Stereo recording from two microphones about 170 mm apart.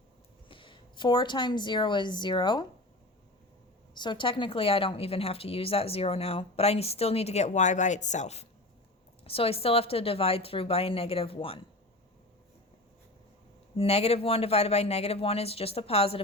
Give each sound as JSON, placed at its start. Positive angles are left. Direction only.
{"t": 0.4, "sound": "a woman's voice", "side_deg": 30}
{"t": 3.9, "sound": "a woman's voice", "side_deg": 25}
{"t": 13.7, "sound": "a woman's voice", "side_deg": 35}